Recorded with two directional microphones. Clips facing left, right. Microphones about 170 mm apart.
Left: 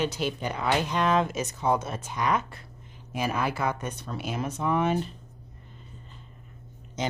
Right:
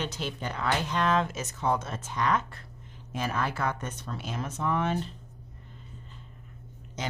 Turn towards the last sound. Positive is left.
turn(degrees=20)  # may be behind; listen again after turning